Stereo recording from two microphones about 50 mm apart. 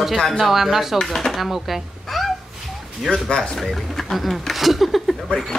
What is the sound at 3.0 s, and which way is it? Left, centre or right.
Speech, centre.